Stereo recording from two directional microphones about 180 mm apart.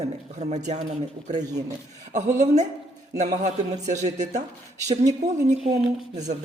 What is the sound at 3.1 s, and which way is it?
Speech, 40° right (ahead or behind).